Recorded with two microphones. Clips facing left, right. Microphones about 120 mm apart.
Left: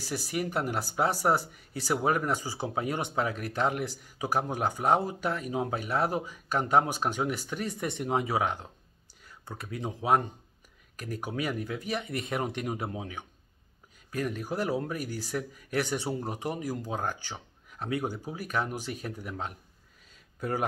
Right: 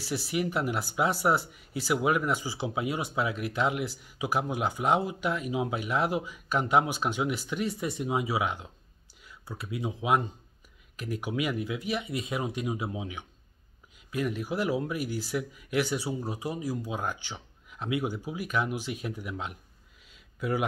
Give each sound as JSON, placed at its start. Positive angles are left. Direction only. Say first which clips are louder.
{"t": 0.0, "sound": "speech", "louder": "right 2 dB", "side_deg": 45}
{"t": 11.0, "sound": "speech", "louder": "right 2 dB", "side_deg": 40}
{"t": 20.1, "sound": "a sound", "louder": "right 2 dB", "side_deg": 45}